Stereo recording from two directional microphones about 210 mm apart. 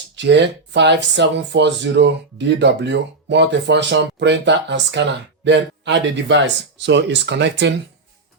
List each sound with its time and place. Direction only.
0.2 s speech: 55° right (ahead or behind)